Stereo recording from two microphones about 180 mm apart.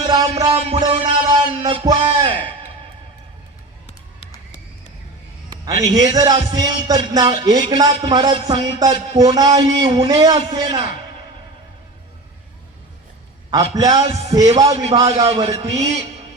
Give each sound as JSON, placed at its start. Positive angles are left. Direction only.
{"t": 0.0, "sound": "music", "side_deg": -20}
{"t": 0.7, "sound": "a man's voice", "side_deg": -30}
{"t": 5.5, "sound": "a man's voice", "side_deg": -20}
{"t": 13.5, "sound": "a man's voice", "side_deg": -20}